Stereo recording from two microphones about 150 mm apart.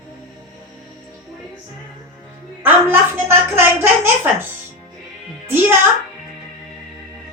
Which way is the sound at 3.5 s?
15° right (ahead or behind).